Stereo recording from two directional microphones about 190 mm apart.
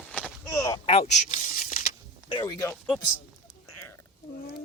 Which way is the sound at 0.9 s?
35° left (ahead or behind).